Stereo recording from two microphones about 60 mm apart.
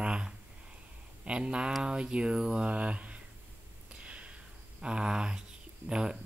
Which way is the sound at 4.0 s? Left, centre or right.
Right.